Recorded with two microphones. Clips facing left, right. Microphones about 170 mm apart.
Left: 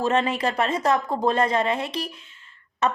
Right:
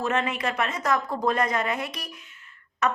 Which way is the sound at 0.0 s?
30° left (ahead or behind).